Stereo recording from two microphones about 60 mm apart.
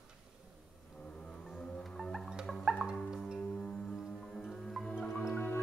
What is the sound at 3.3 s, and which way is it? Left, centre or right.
Music, centre.